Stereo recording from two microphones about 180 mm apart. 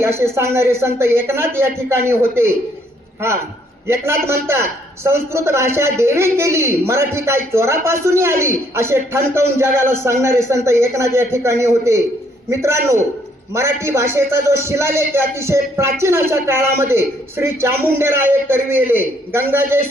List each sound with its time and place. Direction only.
0.0 s a man's voice: 15° right (ahead or behind)
3.8 s a man's voice: 15° right (ahead or behind)